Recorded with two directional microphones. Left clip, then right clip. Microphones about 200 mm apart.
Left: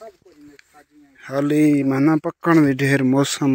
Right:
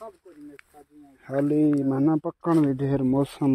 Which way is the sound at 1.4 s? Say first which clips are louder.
Left 6 dB; 15° left (ahead or behind).